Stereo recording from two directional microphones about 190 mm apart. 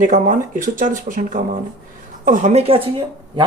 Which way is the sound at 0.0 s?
45° right (ahead or behind).